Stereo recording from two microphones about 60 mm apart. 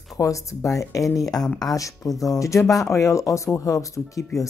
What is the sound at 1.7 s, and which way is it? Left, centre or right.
Speech, left.